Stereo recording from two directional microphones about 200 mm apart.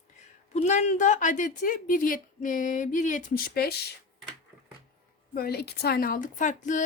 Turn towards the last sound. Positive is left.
turn(degrees=40)  # may be behind; listen again after turning